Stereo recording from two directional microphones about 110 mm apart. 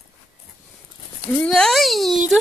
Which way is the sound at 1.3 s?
5° left (ahead or behind).